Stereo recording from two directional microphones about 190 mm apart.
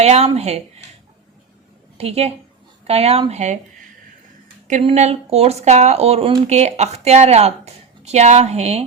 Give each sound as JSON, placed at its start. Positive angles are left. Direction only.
{"t": 0.0, "sound": "speech", "side_deg": -35}
{"t": 2.0, "sound": "speech", "side_deg": -30}
{"t": 4.7, "sound": "speech", "side_deg": -35}